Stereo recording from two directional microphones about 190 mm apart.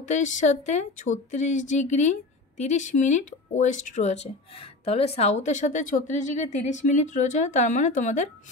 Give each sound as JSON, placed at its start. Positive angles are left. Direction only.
{"t": 0.0, "sound": "speech", "side_deg": 40}